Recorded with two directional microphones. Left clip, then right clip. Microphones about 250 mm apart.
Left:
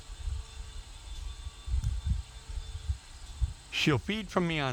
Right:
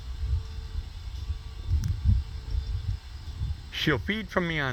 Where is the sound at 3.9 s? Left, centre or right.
Centre.